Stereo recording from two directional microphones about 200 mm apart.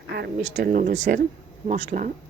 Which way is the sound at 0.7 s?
45° right (ahead or behind).